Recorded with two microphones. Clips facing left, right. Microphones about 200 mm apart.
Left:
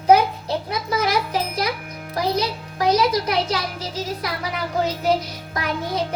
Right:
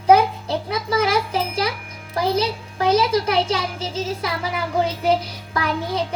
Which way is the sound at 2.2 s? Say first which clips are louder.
Right 2 dB; 30° right (ahead or behind).